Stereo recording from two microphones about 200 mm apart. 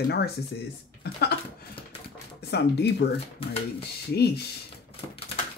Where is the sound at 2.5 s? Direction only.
55° left (ahead or behind).